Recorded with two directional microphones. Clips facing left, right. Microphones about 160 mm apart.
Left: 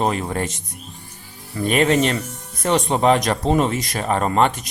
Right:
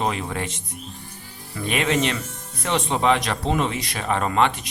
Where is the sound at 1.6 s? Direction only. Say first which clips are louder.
Left 5 dB; 40° left (ahead or behind).